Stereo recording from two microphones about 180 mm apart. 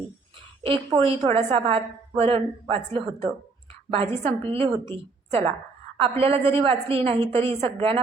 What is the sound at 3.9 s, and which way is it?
A woman's voice, 35° right (ahead or behind).